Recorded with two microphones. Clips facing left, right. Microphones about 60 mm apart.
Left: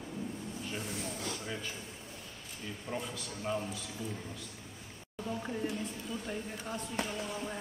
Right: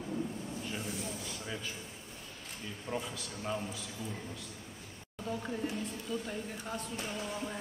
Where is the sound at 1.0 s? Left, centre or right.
Left.